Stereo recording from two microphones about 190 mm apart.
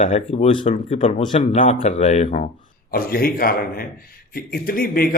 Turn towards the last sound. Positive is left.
turn(degrees=50)  # may be behind; listen again after turning